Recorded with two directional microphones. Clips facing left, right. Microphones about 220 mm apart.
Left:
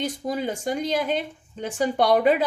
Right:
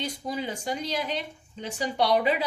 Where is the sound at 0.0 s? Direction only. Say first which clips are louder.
Left 5 dB; 50° left (ahead or behind).